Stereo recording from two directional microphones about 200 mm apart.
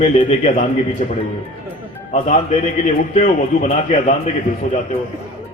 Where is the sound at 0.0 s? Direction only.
30° left (ahead or behind).